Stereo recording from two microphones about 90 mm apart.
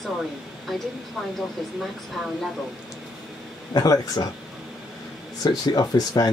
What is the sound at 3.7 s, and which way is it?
Speech, 45° left (ahead or behind).